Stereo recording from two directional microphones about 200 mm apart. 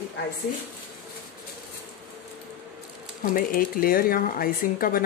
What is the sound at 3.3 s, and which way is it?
A woman's voice, 45° left (ahead or behind).